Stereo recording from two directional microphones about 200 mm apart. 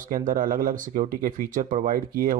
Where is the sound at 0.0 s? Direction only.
40° right (ahead or behind).